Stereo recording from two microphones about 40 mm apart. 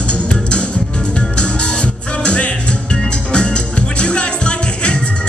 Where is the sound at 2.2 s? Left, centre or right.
Left.